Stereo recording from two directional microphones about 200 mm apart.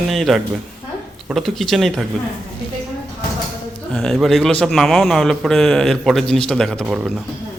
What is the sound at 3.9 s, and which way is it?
A man's voice, centre (ahead or behind).